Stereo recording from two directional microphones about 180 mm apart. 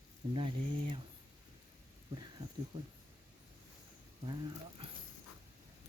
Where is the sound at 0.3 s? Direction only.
30° right (ahead or behind).